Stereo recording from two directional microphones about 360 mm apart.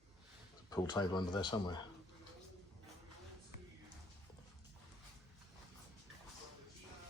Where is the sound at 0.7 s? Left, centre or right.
Centre.